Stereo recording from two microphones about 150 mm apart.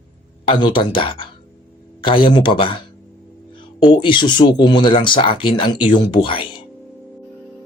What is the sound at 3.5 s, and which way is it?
Music, 30° left (ahead or behind).